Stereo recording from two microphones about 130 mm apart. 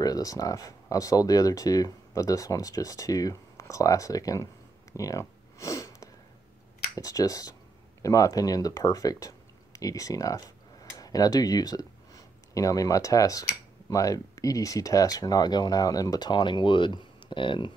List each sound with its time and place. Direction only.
0.0 s speech: 30° left (ahead or behind)
4.9 s sniff: 25° left (ahead or behind)
7.0 s speech: 25° left (ahead or behind)